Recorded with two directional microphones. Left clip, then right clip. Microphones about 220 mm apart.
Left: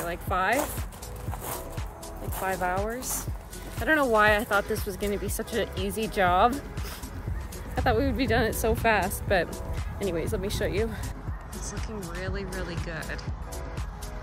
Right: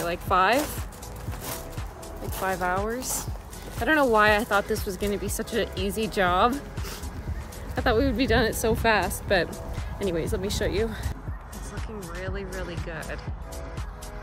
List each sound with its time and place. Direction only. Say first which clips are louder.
0.0 s speech: right 5 dB; 15° right (ahead or behind)
2.3 s speech: right 2 dB; 5° right (ahead or behind)
7.7 s speech: right 2 dB; centre (ahead or behind)